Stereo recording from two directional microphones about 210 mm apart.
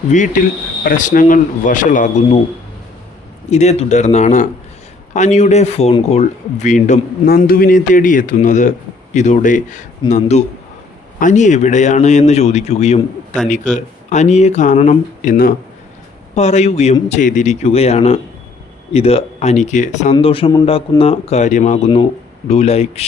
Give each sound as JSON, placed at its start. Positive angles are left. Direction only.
{"t": 0.1, "sound": "speech", "side_deg": 35}
{"t": 3.5, "sound": "a man's voice", "side_deg": 30}